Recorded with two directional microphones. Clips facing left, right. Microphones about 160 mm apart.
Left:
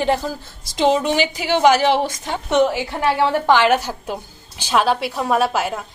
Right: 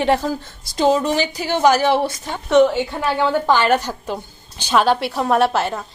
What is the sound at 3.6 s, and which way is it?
A woman's voice, 10° left (ahead or behind).